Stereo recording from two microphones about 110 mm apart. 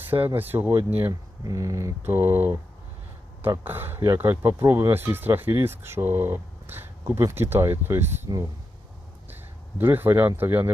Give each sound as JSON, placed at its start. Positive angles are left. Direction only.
{"t": 0.3, "sound": "speech", "side_deg": -15}
{"t": 1.5, "sound": "speech", "side_deg": -30}
{"t": 3.6, "sound": "speech", "side_deg": -20}